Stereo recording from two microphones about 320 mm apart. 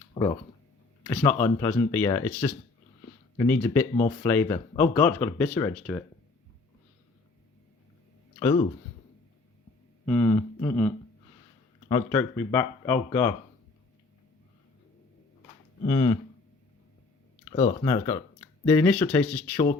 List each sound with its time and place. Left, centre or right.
0.1 s a sound: centre
1.0 s speech: centre
8.4 s speech: centre
10.1 s speech: centre
15.9 s speech: centre
17.5 s speech: centre
18.6 s speech: centre